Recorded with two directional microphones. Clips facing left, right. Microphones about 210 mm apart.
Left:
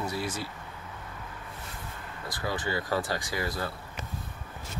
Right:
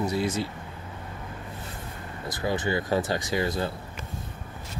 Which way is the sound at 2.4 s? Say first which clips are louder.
Right 5 dB; 20° right (ahead or behind).